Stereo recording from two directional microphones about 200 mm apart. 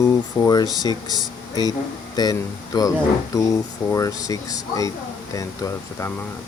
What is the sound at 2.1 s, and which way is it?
Speech, 20° left (ahead or behind).